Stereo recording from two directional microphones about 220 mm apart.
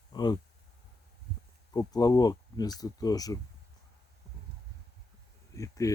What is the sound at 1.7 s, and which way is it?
Speech, 15° left (ahead or behind).